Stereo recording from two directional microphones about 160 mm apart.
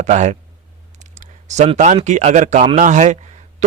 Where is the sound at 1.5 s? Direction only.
45° right (ahead or behind).